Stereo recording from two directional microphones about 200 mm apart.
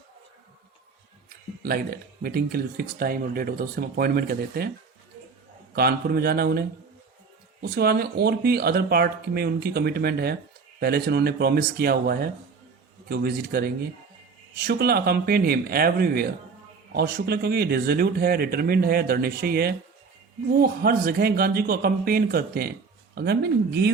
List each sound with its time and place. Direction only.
1.6 s speech: 50° right (ahead or behind)
5.7 s speech: 50° right (ahead or behind)